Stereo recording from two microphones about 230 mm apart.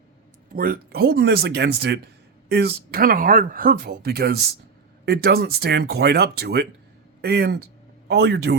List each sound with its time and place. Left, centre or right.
0.5 s speech: right